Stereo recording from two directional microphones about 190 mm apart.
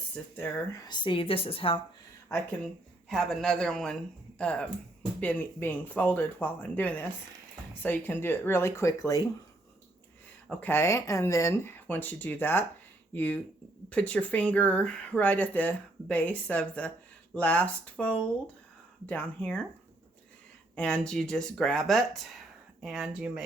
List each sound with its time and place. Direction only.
0.3 s speech: 10° left (ahead or behind); by 1.8 s 30° left (ahead or behind)
3.1 s speech: 5° left (ahead or behind)
10.5 s speech: 10° left (ahead or behind)
20.7 s speech: 5° left (ahead or behind)